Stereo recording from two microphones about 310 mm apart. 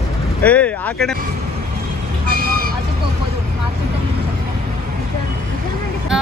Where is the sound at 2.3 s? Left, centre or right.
Right.